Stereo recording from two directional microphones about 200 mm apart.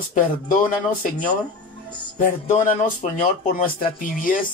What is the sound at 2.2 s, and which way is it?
Speech, 40° left (ahead or behind).